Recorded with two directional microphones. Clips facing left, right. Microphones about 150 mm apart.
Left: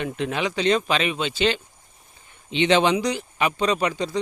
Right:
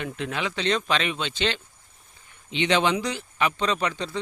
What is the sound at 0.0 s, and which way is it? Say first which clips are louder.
Speech: left 4 dB; 20° left (ahead or behind).